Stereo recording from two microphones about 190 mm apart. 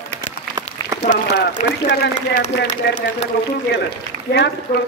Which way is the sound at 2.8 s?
55° left (ahead or behind).